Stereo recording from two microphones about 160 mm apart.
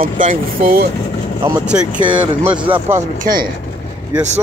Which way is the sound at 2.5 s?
35° right (ahead or behind).